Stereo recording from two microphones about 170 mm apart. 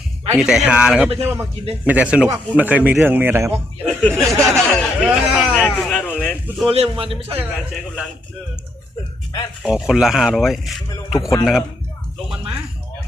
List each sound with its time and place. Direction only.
0.3 s speech: 5° right (ahead or behind)
3.5 s speech: 5° left (ahead or behind)
6.7 s a man's voice: 35° right (ahead or behind)
7.3 s speech: 5° right (ahead or behind)
9.6 s speech: 5° right (ahead or behind)